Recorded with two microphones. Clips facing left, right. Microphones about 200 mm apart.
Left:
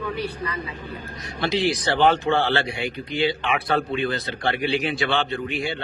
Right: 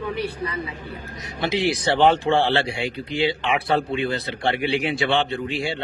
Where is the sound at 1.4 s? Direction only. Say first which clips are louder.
Right 1 dB; 20° right (ahead or behind).